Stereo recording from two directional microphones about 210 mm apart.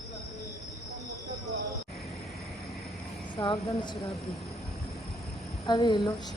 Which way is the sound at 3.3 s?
20° left (ahead or behind).